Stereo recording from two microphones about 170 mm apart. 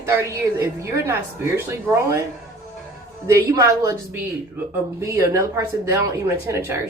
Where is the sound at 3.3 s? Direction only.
20° right (ahead or behind).